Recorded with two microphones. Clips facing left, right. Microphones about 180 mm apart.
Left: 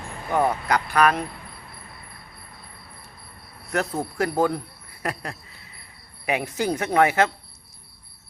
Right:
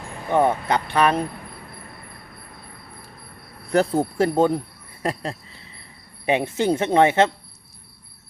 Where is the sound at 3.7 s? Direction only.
30° right (ahead or behind).